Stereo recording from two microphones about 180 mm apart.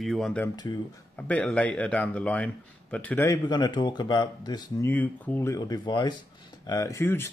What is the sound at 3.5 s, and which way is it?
Speech, 25° left (ahead or behind).